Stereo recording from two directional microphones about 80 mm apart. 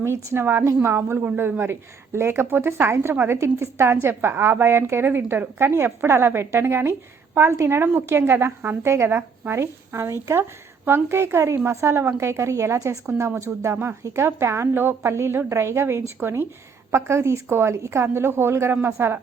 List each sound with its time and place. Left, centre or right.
0.0 s a woman's voice: right